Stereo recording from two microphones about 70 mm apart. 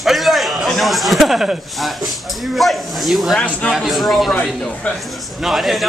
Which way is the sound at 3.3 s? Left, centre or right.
Centre.